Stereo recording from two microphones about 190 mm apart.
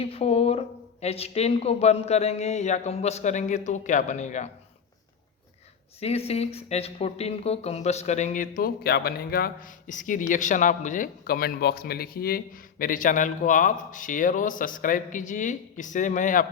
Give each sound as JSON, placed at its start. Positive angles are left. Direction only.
{"t": 0.0, "sound": "a sound", "side_deg": 30}
{"t": 1.0, "sound": "a man's voice", "side_deg": 30}
{"t": 6.0, "sound": "speech", "side_deg": 35}